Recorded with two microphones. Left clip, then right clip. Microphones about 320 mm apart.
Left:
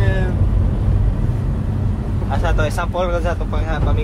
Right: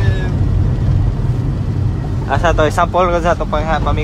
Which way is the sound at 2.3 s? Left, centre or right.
Right.